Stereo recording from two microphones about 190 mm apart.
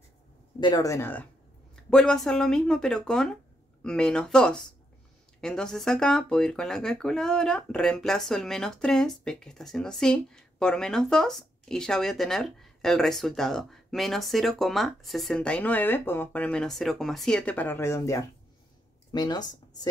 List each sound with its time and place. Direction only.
0.6 s speech: 20° left (ahead or behind)